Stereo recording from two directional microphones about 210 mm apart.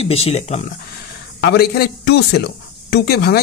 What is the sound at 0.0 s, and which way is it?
Speech, 30° left (ahead or behind).